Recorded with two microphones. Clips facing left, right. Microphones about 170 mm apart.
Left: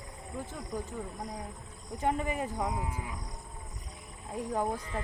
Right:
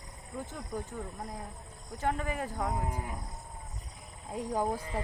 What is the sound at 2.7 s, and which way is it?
Speech, 45° right (ahead or behind).